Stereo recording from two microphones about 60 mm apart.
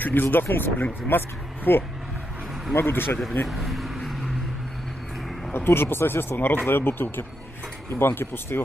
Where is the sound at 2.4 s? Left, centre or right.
Centre.